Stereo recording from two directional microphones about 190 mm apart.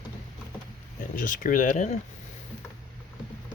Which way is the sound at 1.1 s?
45° left (ahead or behind).